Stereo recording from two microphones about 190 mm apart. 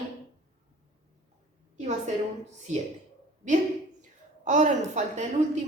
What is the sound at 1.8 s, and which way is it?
Speech, 35° right (ahead or behind).